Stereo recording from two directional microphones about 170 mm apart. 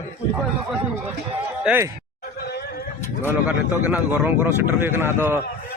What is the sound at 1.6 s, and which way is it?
Speech, 10° right (ahead or behind).